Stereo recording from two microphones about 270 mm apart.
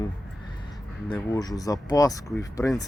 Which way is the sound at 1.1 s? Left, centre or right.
Centre.